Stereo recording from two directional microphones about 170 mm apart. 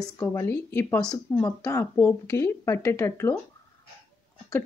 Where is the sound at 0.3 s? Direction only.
15° left (ahead or behind).